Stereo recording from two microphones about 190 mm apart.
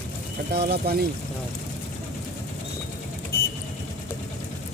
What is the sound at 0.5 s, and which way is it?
Speech, 60° right (ahead or behind).